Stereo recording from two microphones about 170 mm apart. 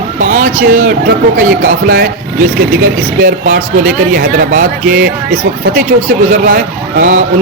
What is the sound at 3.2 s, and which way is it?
Speech, 55° right (ahead or behind).